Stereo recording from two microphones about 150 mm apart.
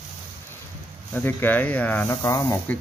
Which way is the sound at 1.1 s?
10° left (ahead or behind).